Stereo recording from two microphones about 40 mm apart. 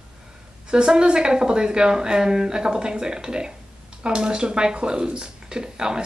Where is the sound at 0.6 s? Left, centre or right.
Right.